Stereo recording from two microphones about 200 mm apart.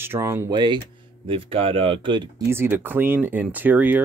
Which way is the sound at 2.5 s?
10° right (ahead or behind).